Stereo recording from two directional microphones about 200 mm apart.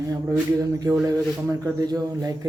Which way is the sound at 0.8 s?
15° right (ahead or behind).